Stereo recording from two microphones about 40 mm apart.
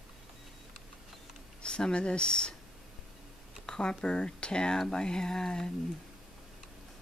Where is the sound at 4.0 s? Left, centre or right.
Left.